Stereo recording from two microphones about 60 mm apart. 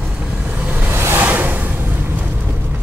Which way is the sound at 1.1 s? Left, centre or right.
Right.